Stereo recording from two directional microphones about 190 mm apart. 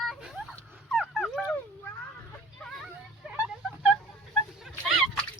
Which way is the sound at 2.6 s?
5° left (ahead or behind).